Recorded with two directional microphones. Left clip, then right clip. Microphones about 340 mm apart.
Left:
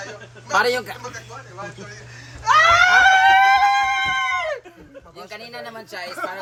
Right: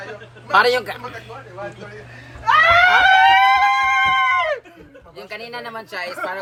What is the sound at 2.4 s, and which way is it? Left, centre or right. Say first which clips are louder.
Screaming: right 1 dB; centre.